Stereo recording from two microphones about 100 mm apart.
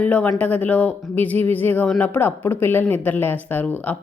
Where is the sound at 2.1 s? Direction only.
20° left (ahead or behind).